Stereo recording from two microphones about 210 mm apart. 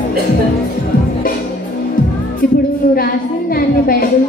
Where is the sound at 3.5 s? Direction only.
45° left (ahead or behind).